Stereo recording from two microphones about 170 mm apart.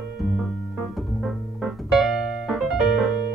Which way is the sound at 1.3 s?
Centre (ahead or behind).